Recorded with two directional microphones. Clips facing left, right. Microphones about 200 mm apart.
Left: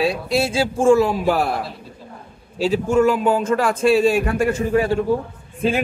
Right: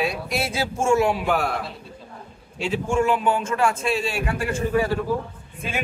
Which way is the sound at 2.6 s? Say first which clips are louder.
Left 6 dB; 35° left (ahead or behind).